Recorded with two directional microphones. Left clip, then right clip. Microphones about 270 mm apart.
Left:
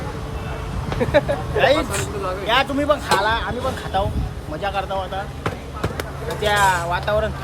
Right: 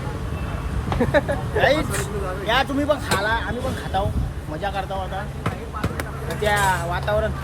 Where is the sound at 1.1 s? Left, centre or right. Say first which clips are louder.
Left 3 dB; centre.